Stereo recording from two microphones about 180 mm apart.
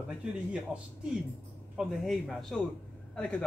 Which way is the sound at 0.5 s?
5° right (ahead or behind).